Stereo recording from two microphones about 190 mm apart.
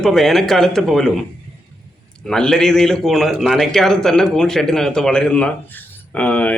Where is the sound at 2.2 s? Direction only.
5° left (ahead or behind).